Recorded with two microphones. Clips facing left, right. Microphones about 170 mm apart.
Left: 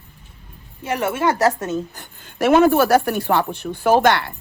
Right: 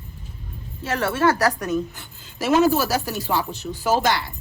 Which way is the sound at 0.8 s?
15° left (ahead or behind).